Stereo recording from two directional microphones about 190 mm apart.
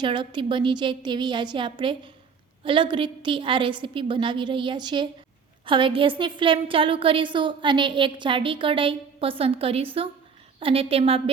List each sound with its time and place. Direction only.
0.0 s a woman's voice: 25° right (ahead or behind)